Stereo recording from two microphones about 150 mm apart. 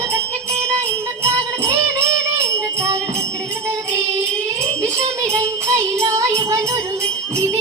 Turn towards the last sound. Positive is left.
turn(degrees=-20)  # may be behind; listen again after turning